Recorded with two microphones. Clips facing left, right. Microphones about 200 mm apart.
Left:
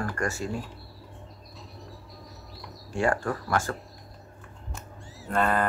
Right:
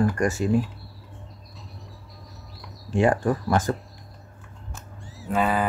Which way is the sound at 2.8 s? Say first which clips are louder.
Right 5 dB; 20° right (ahead or behind).